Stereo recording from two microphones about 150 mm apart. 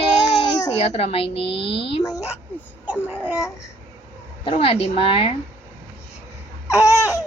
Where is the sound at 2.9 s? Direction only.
15° left (ahead or behind).